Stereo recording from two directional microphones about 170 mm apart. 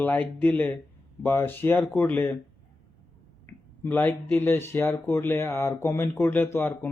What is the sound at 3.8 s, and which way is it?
A man's voice, 10° left (ahead or behind).